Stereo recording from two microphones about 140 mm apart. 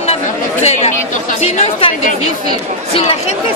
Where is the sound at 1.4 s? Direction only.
45° left (ahead or behind).